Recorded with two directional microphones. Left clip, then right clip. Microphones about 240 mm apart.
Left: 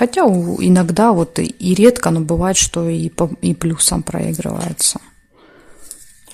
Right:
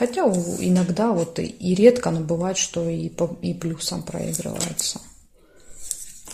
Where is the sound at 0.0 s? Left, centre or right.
Left.